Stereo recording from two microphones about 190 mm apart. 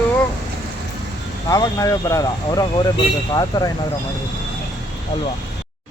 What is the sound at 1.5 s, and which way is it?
Speech, 20° left (ahead or behind).